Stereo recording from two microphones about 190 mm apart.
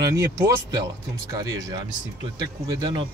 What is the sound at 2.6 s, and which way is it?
Speech, 20° right (ahead or behind).